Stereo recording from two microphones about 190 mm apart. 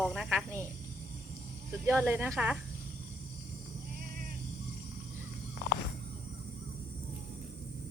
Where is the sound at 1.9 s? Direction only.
10° right (ahead or behind).